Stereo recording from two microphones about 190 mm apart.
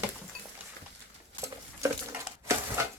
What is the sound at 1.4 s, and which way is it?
Patter, 15° right (ahead or behind).